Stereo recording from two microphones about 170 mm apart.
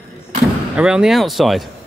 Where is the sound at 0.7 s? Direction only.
5° right (ahead or behind).